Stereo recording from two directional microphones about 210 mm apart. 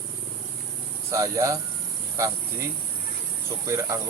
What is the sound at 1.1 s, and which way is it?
Speech, 15° right (ahead or behind).